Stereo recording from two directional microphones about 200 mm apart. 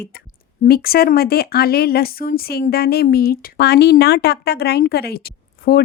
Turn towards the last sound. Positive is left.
turn(degrees=50)  # may be behind; listen again after turning